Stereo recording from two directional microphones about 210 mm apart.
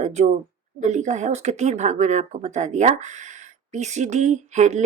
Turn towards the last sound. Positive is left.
turn(degrees=-35)  # may be behind; listen again after turning